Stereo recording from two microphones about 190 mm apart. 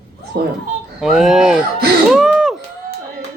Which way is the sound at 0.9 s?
Centre (ahead or behind).